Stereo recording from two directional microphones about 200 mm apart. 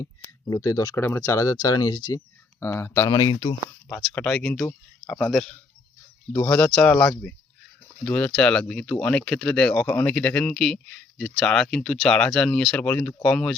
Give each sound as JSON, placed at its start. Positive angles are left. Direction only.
{"t": 0.0, "sound": "speech", "side_deg": 15}
{"t": 3.8, "sound": "speech", "side_deg": 5}